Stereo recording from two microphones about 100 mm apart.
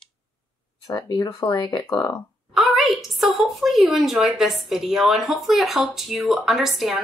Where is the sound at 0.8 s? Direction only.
40° left (ahead or behind).